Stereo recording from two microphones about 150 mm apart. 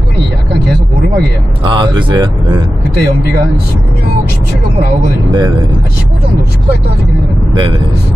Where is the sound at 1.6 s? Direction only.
35° right (ahead or behind).